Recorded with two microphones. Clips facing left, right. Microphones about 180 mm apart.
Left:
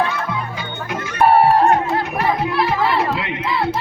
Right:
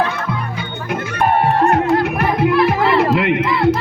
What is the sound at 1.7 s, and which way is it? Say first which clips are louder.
Music: right 3 dB; 65° right (ahead or behind).